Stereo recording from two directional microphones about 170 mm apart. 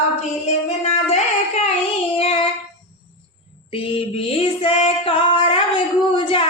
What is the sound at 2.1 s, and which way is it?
Child singing, 35° left (ahead or behind).